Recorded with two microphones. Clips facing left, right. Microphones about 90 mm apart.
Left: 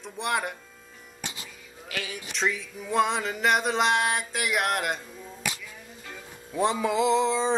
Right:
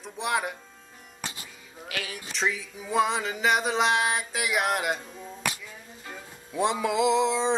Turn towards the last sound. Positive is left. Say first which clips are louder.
# even
turn(degrees=0)  # may be behind; listen again after turning